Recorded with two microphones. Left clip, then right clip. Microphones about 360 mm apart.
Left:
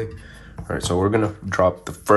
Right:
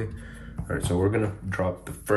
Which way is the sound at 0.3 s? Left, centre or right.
Centre.